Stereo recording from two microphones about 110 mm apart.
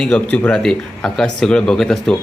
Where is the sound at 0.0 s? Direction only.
10° left (ahead or behind).